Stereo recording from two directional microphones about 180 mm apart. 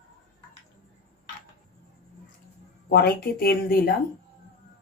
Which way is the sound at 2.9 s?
60° left (ahead or behind).